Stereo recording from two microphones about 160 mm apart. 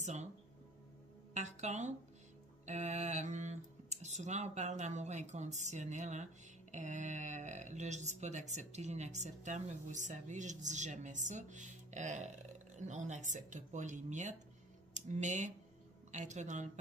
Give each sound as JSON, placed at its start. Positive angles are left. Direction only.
{"t": 0.0, "sound": "speech", "side_deg": -45}
{"t": 1.3, "sound": "speech", "side_deg": -45}